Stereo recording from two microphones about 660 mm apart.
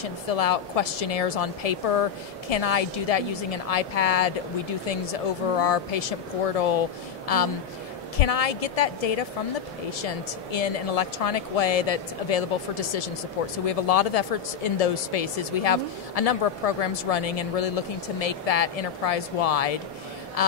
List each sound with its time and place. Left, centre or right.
0.0 s speech: left